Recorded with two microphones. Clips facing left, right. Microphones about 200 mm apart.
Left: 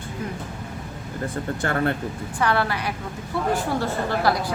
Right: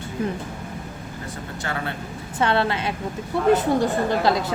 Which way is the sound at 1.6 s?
55° left (ahead or behind).